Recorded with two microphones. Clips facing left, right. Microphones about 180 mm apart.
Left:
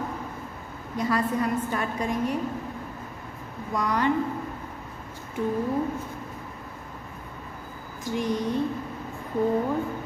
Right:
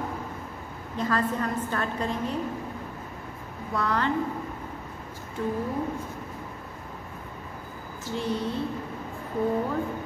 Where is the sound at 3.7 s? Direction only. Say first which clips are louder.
Left 1 dB; 15° left (ahead or behind).